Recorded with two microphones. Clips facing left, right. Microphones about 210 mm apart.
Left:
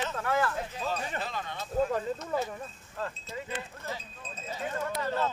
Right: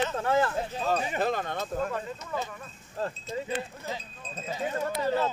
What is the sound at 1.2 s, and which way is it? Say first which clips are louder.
Speech: right 8 dB; 50° right (ahead or behind).